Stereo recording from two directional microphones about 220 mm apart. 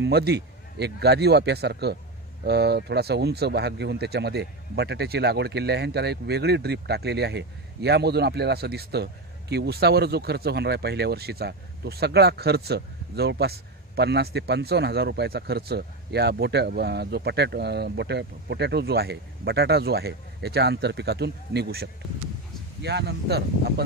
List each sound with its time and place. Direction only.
0.0 s speech: 50° right (ahead or behind)